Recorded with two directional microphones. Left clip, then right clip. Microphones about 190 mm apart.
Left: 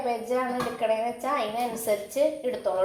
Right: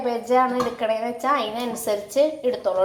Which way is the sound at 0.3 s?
20° right (ahead or behind).